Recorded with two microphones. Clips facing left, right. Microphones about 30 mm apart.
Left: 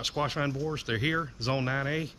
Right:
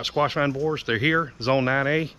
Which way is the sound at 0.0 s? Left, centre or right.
Right.